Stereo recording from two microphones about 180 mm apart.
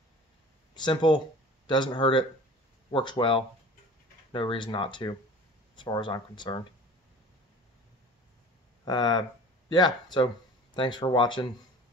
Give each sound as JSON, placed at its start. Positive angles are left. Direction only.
{"t": 0.7, "sound": "speech", "side_deg": 25}
{"t": 8.8, "sound": "speech", "side_deg": 20}